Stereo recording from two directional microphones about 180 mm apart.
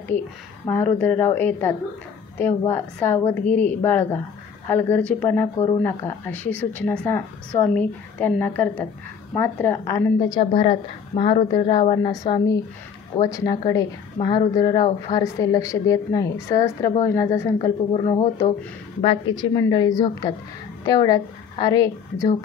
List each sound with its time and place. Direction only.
0.1 s speech: 10° left (ahead or behind)
10.4 s a woman's voice: 30° left (ahead or behind)
17.9 s speech: 30° left (ahead or behind)
19.5 s a woman's voice: 25° left (ahead or behind)